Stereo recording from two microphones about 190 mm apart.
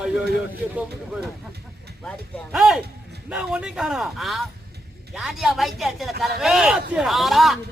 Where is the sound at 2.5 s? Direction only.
Centre (ahead or behind).